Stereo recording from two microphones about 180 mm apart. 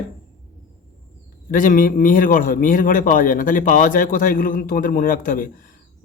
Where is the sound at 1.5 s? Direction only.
50° left (ahead or behind).